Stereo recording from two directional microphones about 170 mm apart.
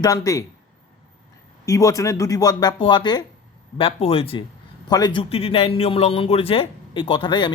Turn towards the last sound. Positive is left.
turn(degrees=30)  # may be behind; listen again after turning